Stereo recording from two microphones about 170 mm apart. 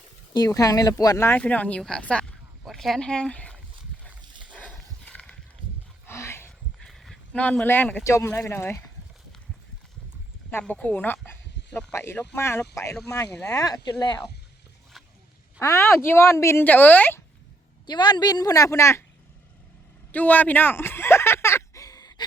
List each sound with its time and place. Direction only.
0.3 s speech: 20° left (ahead or behind)
4.5 s horse: 5° left (ahead or behind)
5.6 s a sound: 30° right (ahead or behind)
6.1 s a sound: 15° left (ahead or behind)
6.8 s speech: centre (ahead or behind)
10.5 s a woman's voice: 10° left (ahead or behind); by 14.2 s 25° left (ahead or behind)
15.5 s a woman's voice: 10° left (ahead or behind)
17.8 s speech: 25° left (ahead or behind)
20.1 s a sound: 10° left (ahead or behind)